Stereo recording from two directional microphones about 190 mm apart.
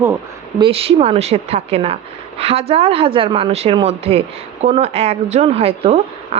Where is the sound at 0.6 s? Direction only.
30° right (ahead or behind).